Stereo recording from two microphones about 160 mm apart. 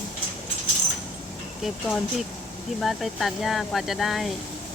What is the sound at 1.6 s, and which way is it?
Speech, centre (ahead or behind).